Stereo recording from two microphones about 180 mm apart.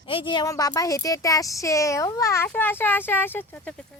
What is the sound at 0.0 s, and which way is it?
Speech, 30° left (ahead or behind).